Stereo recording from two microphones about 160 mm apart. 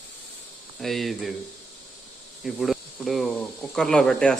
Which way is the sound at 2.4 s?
Centre (ahead or behind).